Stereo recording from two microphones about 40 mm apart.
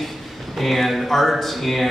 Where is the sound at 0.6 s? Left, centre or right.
Centre.